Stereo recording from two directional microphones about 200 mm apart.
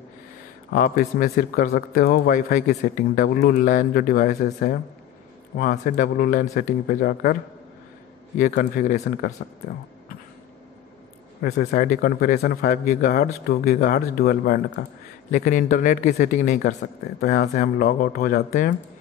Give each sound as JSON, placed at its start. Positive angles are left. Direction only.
{"t": 0.7, "sound": "speech", "side_deg": 45}
{"t": 8.4, "sound": "speech", "side_deg": 40}
{"t": 11.4, "sound": "speech", "side_deg": 50}